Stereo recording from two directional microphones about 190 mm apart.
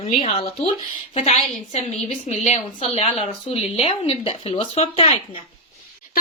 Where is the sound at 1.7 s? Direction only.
35° left (ahead or behind).